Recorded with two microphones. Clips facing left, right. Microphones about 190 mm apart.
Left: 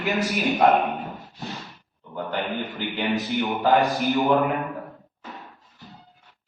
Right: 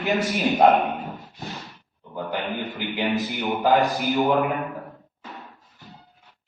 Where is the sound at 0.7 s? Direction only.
Centre (ahead or behind).